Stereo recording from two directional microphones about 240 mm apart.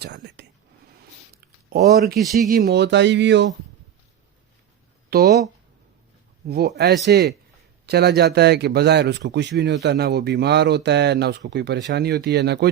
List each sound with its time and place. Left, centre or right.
0.0 s speech: right
1.7 s a man's voice: right
5.1 s a man's voice: right
6.5 s a man's voice: right